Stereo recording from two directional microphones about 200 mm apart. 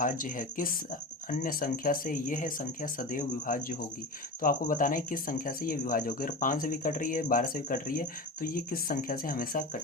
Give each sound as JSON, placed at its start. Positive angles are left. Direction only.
{"t": 0.0, "sound": "speech", "side_deg": 40}